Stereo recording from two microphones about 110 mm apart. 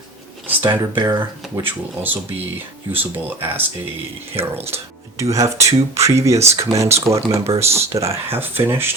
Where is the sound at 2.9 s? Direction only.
20° right (ahead or behind).